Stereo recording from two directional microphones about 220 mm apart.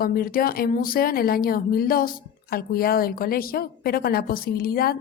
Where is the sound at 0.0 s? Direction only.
40° left (ahead or behind).